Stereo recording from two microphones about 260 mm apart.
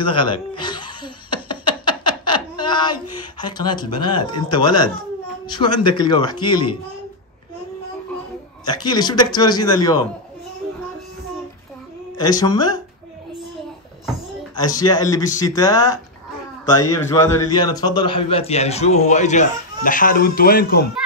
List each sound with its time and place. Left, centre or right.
0.0 s laughter: centre
5.9 s speech: centre
8.6 s speech: centre
12.2 s speech: centre
14.5 s a man's voice: centre; by 20.8 s left